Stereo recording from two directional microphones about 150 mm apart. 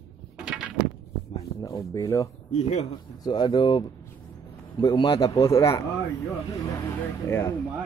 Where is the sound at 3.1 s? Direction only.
30° left (ahead or behind).